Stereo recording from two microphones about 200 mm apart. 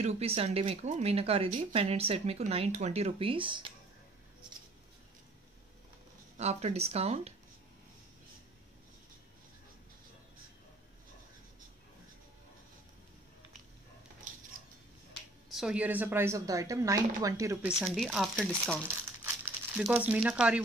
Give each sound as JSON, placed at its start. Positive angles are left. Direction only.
{"t": 0.0, "sound": "speech", "side_deg": -30}
{"t": 6.3, "sound": "speech", "side_deg": -35}
{"t": 15.5, "sound": "speech", "side_deg": -5}
{"t": 19.2, "sound": "crumpling", "side_deg": -10}
{"t": 20.2, "sound": "speech", "side_deg": -5}